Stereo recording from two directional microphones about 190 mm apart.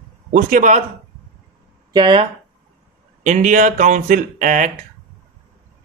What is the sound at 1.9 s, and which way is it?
Speech, 25° right (ahead or behind).